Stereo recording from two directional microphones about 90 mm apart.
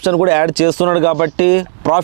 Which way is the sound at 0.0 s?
15° right (ahead or behind).